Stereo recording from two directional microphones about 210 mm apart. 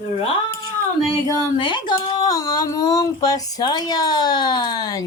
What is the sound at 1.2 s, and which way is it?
Speech, 20° left (ahead or behind).